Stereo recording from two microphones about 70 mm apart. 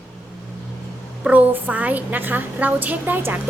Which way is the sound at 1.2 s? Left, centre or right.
Right.